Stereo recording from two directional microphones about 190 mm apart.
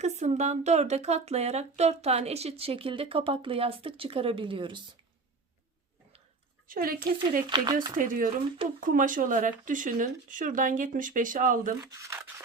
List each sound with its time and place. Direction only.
0.0 s speech: 35° right (ahead or behind)
6.7 s speech: 50° right (ahead or behind)
7.5 s speech: 20° right (ahead or behind)
7.9 s speech: 45° right (ahead or behind)
11.8 s speech: 15° right (ahead or behind)